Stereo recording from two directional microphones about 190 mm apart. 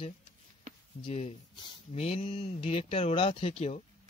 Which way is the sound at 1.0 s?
30° left (ahead or behind).